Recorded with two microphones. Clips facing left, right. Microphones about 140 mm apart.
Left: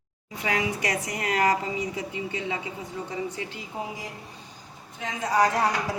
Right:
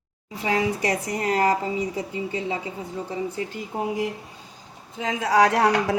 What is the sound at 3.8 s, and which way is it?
Speech, 65° right (ahead or behind).